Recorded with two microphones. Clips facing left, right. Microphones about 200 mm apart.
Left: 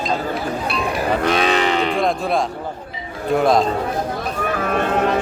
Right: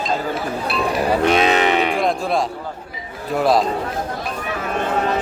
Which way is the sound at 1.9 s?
Centre (ahead or behind).